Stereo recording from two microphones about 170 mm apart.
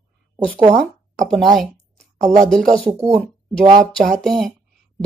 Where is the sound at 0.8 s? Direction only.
Centre (ahead or behind).